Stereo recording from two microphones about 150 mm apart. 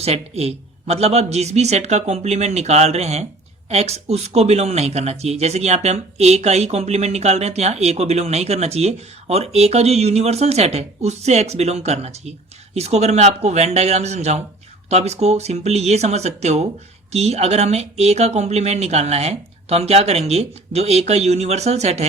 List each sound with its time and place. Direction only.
0.0 s speech: 45° right (ahead or behind)